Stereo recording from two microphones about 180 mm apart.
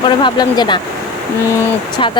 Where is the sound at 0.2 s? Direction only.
25° left (ahead or behind).